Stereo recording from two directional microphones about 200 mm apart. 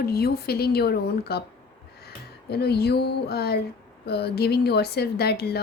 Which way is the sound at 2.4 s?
55° left (ahead or behind).